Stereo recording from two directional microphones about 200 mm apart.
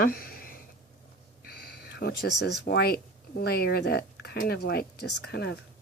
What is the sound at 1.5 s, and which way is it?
Speech, 50° left (ahead or behind).